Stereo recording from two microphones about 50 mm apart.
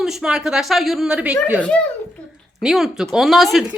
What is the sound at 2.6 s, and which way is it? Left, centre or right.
Speech, centre.